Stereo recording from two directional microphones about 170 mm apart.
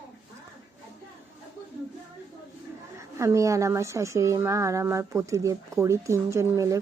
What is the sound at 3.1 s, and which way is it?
A woman's voice, 15° right (ahead or behind).